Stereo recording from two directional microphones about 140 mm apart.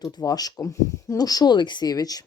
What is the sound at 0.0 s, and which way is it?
Speech, 25° left (ahead or behind).